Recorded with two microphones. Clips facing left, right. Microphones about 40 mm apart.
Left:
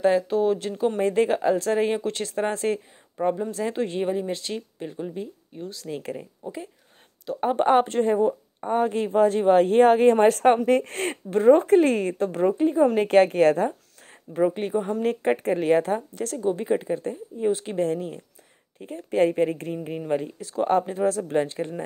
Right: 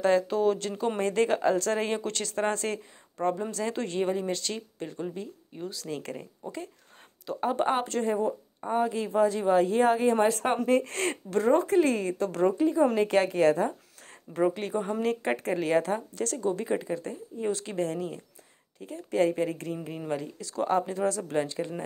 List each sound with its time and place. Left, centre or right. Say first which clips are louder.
0.0 s speech: left 3 dB; centre
7.3 s a woman's voice: left 7 dB; left
8.7 s speech: left 4 dB; left
10.7 s a woman's voice: left 3 dB; left
11.6 s a woman's voice: left 5 dB; left
14.6 s a woman's voice: left 4 dB; left
20.8 s speech: left 4 dB; left